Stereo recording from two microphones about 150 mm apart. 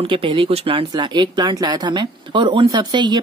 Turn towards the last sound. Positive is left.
turn(degrees=-30)  # may be behind; listen again after turning